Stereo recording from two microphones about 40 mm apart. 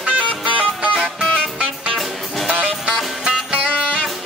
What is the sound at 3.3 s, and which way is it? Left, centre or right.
Music, right.